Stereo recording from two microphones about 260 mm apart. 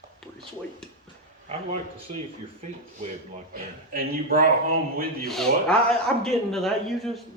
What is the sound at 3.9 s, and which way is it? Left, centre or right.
Speech, right.